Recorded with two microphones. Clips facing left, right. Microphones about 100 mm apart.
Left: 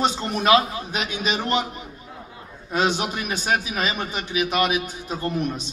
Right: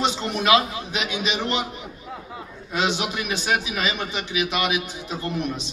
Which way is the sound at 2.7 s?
40° left (ahead or behind).